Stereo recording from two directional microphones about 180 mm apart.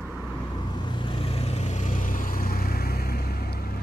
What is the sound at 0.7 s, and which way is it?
Vehicle, 25° left (ahead or behind).